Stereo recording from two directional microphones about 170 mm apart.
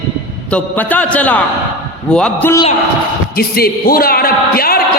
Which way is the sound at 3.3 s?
65° left (ahead or behind).